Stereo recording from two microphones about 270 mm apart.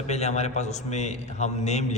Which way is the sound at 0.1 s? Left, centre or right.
Left.